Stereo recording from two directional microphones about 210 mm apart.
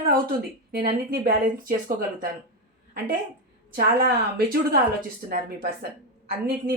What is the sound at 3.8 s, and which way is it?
Speech, 45° right (ahead or behind).